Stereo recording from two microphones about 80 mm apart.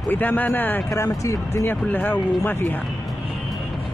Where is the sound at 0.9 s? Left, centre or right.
Left.